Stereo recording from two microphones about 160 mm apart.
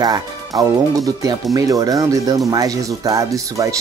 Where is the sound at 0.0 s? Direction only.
25° right (ahead or behind).